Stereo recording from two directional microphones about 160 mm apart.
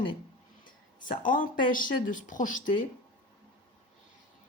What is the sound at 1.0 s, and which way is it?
Speech, 55° left (ahead or behind).